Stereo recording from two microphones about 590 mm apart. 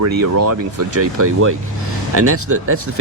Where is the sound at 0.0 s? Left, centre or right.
Right.